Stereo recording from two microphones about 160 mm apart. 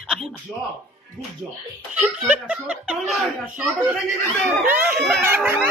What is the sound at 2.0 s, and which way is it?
Speech, 5° right (ahead or behind).